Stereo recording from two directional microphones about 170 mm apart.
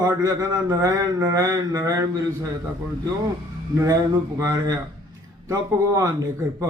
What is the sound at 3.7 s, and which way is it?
Speech, 20° right (ahead or behind).